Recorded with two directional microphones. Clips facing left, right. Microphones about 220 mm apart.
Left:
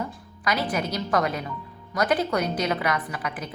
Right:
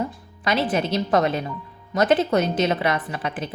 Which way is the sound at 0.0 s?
25° right (ahead or behind).